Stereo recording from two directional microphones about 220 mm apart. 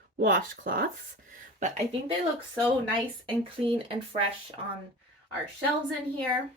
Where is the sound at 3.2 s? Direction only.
25° right (ahead or behind).